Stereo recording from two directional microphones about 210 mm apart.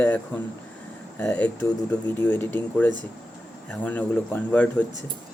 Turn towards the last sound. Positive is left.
turn(degrees=10)  # may be behind; listen again after turning